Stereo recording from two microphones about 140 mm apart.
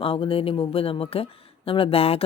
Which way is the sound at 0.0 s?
40° left (ahead or behind).